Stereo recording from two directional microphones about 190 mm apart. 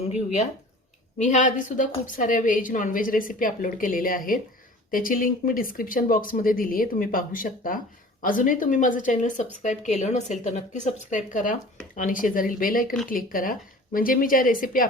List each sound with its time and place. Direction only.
0.1 s a woman's voice: 40° left (ahead or behind)